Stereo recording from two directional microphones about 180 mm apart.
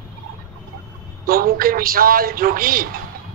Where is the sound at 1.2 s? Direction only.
55° right (ahead or behind).